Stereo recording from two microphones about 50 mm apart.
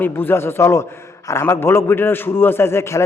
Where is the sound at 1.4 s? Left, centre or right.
Left.